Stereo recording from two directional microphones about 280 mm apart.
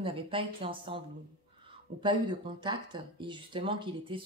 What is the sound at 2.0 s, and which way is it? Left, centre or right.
Speech, centre.